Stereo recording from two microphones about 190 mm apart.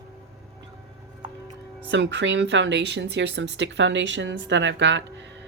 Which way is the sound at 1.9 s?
70° right (ahead or behind).